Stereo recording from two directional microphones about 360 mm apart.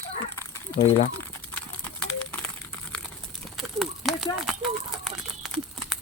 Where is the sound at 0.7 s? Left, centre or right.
Centre.